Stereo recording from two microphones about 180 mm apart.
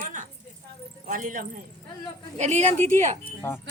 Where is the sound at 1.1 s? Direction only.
45° right (ahead or behind).